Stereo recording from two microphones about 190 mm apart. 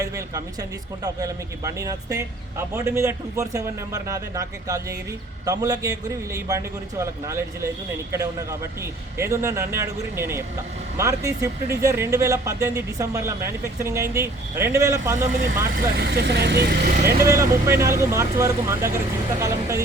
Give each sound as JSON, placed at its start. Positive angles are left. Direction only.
{"t": 1.0, "sound": "a man's voice", "side_deg": -20}
{"t": 7.0, "sound": "speech", "side_deg": -15}
{"t": 15.8, "sound": "speech", "side_deg": -55}
{"t": 17.2, "sound": "speech", "side_deg": -15}